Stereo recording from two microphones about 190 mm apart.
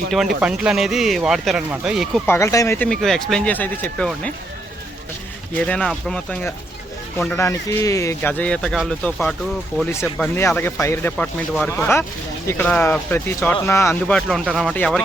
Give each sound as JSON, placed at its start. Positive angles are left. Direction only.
{"t": 0.4, "sound": "a man's voice", "side_deg": -5}
{"t": 2.2, "sound": "speech", "side_deg": 15}
{"t": 5.6, "sound": "a man's voice", "side_deg": 5}
{"t": 10.3, "sound": "speech", "side_deg": 10}
{"t": 14.2, "sound": "a man's voice", "side_deg": 0}